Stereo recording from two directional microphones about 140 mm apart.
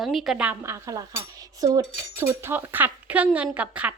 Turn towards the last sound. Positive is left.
turn(degrees=-10)  # may be behind; listen again after turning